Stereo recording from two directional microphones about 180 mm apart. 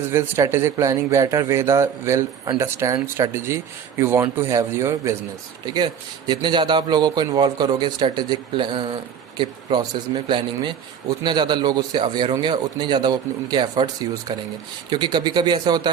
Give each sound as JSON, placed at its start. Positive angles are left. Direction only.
{"t": 0.0, "sound": "a man's voice", "side_deg": -15}